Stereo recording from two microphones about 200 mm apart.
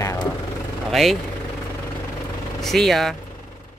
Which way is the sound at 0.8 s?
Centre (ahead or behind).